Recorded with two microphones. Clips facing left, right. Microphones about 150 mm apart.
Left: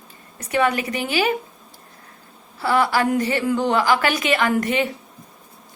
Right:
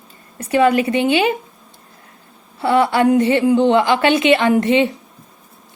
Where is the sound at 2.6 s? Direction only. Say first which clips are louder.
Right 5 dB; 25° right (ahead or behind).